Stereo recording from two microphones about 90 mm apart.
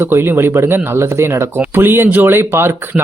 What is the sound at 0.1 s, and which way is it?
Speech, 25° right (ahead or behind).